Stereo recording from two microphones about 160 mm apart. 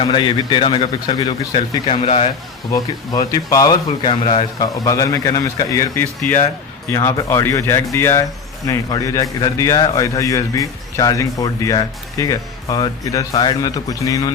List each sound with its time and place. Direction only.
0.0 s speech: 30° left (ahead or behind)
2.7 s a man's voice: 20° left (ahead or behind)
4.6 s a man's voice: 20° left (ahead or behind)